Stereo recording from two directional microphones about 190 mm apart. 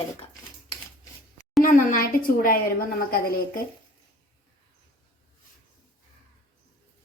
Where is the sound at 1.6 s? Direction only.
45° left (ahead or behind).